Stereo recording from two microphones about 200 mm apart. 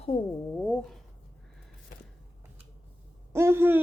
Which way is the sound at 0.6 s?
5° left (ahead or behind).